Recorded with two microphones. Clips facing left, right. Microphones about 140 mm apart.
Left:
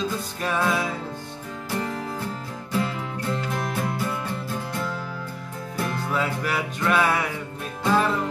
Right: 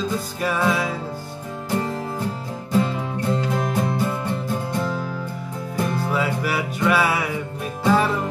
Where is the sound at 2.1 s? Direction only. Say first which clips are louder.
Right 4 dB; 15° right (ahead or behind).